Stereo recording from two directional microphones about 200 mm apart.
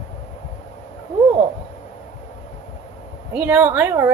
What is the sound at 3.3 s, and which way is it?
Speech, 10° right (ahead or behind).